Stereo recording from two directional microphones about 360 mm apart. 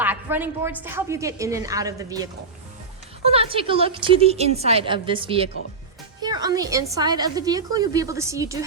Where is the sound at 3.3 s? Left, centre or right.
Centre.